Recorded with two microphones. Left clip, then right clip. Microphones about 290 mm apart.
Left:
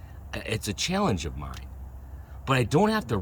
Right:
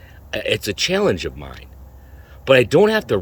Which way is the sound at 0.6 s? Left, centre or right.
Centre.